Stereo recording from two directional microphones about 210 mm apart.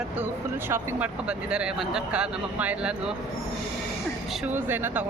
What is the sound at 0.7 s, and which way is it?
A woman's voice, 10° right (ahead or behind).